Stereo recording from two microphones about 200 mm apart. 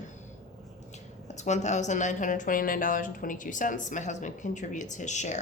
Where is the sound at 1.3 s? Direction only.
35° left (ahead or behind).